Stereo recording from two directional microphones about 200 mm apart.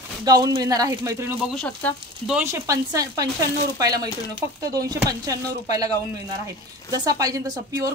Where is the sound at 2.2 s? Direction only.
10° right (ahead or behind).